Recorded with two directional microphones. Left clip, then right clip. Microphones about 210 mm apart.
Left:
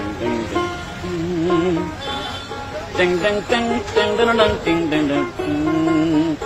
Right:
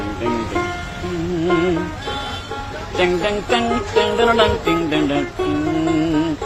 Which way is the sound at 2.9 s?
Centre (ahead or behind).